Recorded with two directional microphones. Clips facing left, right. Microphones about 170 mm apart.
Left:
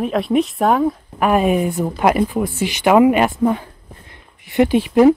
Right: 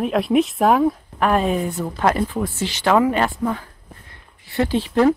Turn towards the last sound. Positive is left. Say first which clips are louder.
# left 5 dB
turn(degrees=15)  # may be behind; listen again after turning